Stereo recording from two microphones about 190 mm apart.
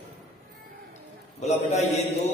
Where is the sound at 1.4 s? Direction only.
35° left (ahead or behind).